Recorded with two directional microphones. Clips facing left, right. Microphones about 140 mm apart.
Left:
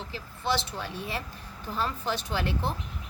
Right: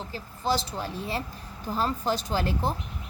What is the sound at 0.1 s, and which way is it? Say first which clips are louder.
Speech: right 2 dB; 40° right (ahead or behind).